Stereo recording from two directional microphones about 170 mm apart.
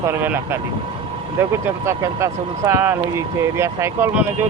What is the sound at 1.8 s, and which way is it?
Speech, 15° right (ahead or behind).